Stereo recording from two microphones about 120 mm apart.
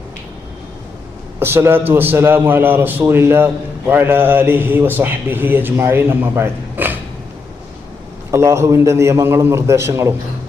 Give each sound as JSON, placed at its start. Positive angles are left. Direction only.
{"t": 1.4, "sound": "a man's voice", "side_deg": -20}
{"t": 8.3, "sound": "a man's voice", "side_deg": -25}